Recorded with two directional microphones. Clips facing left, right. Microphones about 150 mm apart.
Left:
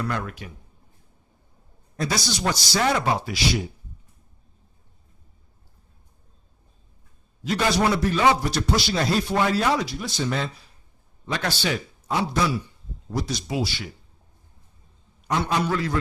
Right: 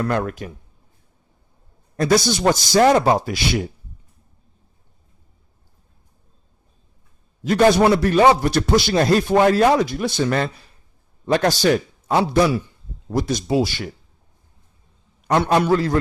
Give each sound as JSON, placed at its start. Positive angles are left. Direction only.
{"t": 0.0, "sound": "speech", "side_deg": -50}
{"t": 2.0, "sound": "speech", "side_deg": -55}
{"t": 7.4, "sound": "speech", "side_deg": -50}
{"t": 11.3, "sound": "speech", "side_deg": -45}
{"t": 12.0, "sound": "a man's voice", "side_deg": -65}
{"t": 15.4, "sound": "speech", "side_deg": -55}
{"t": 15.7, "sound": "a man's voice", "side_deg": -35}